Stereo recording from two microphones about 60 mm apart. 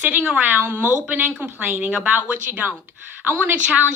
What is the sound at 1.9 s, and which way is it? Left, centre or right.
Speech, centre.